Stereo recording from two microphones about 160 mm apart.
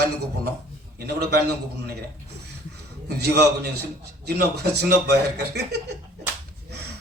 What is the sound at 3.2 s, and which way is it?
A man's voice, 90° right.